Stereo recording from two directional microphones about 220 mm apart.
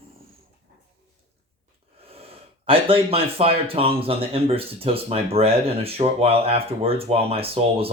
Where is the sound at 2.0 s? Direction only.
25° right (ahead or behind).